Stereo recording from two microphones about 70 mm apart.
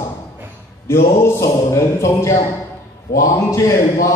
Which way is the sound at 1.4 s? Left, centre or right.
Left.